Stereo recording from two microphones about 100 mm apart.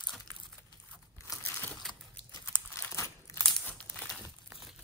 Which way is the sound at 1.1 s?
30° left (ahead or behind).